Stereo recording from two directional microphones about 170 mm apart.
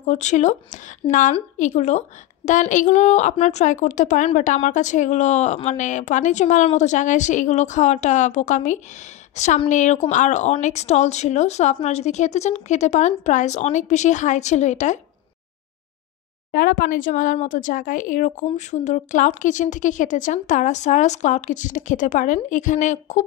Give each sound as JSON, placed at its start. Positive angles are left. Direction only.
{"t": 0.0, "sound": "a woman's voice", "side_deg": 45}
{"t": 16.5, "sound": "a woman's voice", "side_deg": 60}